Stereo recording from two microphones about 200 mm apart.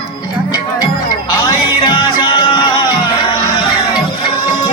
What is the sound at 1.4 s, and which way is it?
Music, 25° left (ahead or behind).